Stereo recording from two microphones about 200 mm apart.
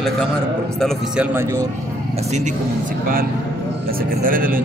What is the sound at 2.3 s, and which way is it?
Speech, 35° right (ahead or behind).